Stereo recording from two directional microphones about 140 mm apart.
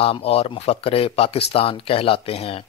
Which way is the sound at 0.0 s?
45° left (ahead or behind).